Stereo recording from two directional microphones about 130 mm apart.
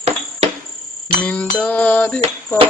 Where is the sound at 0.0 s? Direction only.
55° right (ahead or behind).